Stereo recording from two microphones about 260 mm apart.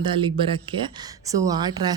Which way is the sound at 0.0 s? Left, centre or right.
Centre.